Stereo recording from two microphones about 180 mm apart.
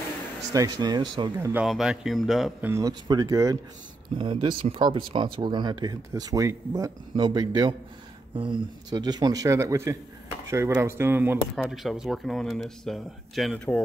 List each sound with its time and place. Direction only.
0.5 s speech: 20° right (ahead or behind)
1.3 s speech: 10° right (ahead or behind)
1.7 s speech: centre (ahead or behind)
2.7 s speech: 20° right (ahead or behind)
11.5 s speech: centre (ahead or behind)